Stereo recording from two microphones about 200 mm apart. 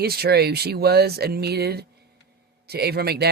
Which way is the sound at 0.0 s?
50° right (ahead or behind).